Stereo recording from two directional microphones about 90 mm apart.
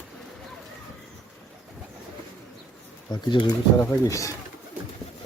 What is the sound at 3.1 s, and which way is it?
Speech, 60° left (ahead or behind).